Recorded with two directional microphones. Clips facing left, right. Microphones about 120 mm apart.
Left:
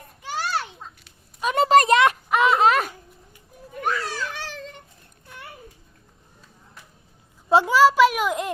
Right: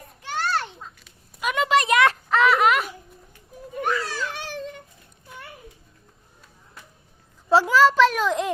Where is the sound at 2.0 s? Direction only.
15° left (ahead or behind); by 2.9 s 35° left (ahead or behind).